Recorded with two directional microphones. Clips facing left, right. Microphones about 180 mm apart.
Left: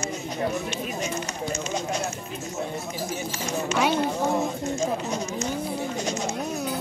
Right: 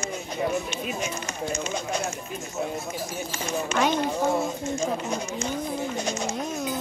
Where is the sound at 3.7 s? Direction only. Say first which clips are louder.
Left 1 dB; 10° left (ahead or behind).